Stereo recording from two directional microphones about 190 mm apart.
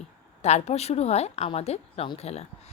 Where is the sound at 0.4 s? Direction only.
35° left (ahead or behind).